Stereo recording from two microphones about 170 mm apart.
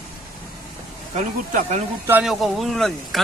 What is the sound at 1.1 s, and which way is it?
Speech, 45° right (ahead or behind).